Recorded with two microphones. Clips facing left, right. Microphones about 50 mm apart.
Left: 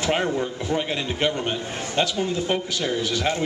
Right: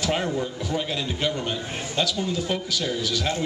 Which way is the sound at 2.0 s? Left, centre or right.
Left.